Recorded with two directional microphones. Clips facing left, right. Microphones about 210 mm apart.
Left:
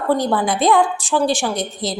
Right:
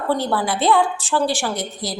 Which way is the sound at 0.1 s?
15° left (ahead or behind).